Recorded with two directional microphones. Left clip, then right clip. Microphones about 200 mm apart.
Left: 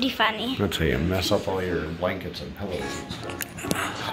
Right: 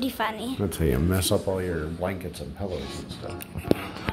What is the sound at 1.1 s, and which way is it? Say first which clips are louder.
Speech: left 1 dB; 55° right (ahead or behind).